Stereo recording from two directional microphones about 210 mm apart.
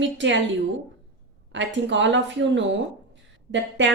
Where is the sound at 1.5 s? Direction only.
60° right (ahead or behind).